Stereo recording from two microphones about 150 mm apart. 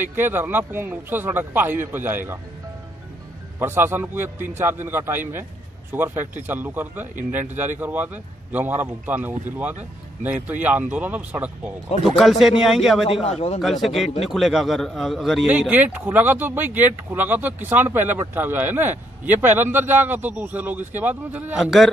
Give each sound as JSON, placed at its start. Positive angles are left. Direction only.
{"t": 0.0, "sound": "a man's voice", "side_deg": -15}
{"t": 3.5, "sound": "a man's voice", "side_deg": -15}
{"t": 13.0, "sound": "a man's voice", "side_deg": 40}
{"t": 13.6, "sound": "a man's voice", "side_deg": 0}